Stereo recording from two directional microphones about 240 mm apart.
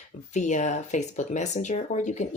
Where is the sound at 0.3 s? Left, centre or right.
Left.